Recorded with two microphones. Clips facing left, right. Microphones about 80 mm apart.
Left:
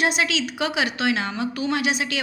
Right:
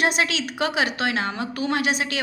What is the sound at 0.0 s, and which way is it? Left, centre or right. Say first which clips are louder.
A woman's voice: even; right.